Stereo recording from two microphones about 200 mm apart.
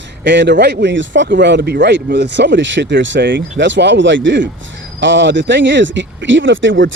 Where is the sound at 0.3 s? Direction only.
60° right (ahead or behind).